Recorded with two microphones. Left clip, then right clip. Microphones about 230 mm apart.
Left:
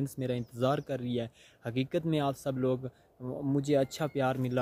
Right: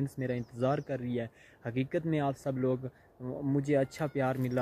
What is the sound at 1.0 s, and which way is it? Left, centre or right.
Speech, left.